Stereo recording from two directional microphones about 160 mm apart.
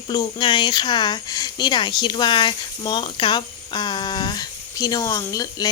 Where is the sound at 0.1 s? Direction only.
25° left (ahead or behind).